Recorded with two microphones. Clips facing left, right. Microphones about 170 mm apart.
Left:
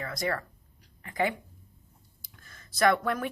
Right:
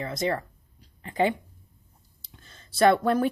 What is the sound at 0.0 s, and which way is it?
Speech, 25° right (ahead or behind).